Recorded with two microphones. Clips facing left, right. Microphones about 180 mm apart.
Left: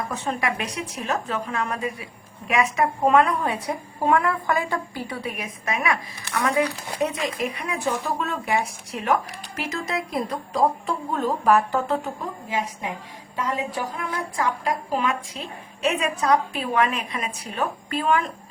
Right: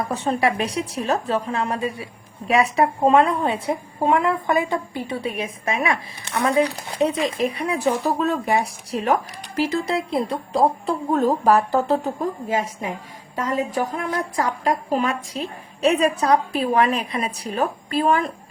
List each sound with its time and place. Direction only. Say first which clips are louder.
0.1 s a woman's voice: right 5 dB; 35° right (ahead or behind)
11.1 s a woman's voice: right 3 dB; 45° right (ahead or behind)